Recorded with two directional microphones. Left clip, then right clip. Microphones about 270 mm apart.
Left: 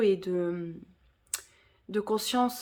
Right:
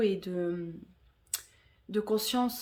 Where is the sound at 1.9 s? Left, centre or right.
Centre.